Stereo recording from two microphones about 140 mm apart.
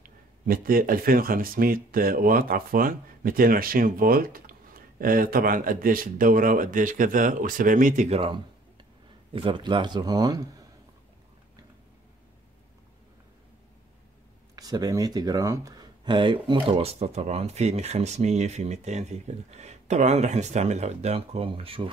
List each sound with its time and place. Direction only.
0.0 s speech: 90° right; by 8.2 s 60° right (ahead or behind)
8.2 s a sound: 35° right (ahead or behind)
9.3 s speech: 35° right (ahead or behind)
14.5 s speech: 25° right (ahead or behind)